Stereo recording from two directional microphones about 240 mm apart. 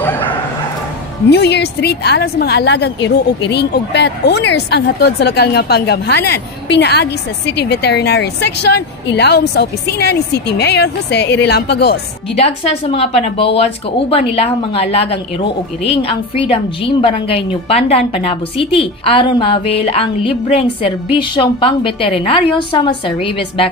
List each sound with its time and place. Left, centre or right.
1.3 s a woman's voice: left
12.4 s a woman's voice: left